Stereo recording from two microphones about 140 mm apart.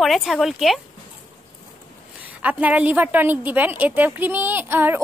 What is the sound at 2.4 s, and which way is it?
A woman's voice, 10° right (ahead or behind).